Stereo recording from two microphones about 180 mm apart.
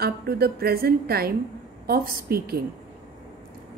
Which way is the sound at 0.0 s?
60° right (ahead or behind).